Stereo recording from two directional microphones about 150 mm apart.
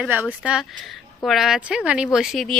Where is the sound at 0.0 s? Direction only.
10° right (ahead or behind).